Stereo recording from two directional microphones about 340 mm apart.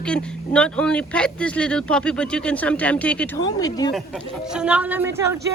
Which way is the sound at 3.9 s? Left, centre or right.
Centre.